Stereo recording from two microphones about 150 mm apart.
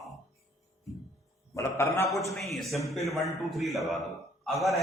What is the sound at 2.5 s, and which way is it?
A man's voice, centre (ahead or behind).